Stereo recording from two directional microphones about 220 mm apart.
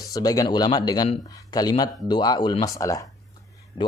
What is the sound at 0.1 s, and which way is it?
Speech, 15° left (ahead or behind).